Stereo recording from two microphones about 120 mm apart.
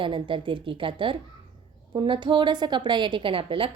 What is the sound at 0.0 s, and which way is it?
A woman's voice, 45° right (ahead or behind).